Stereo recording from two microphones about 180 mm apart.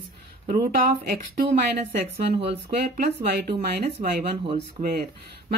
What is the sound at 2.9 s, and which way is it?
Speech, 60° right (ahead or behind).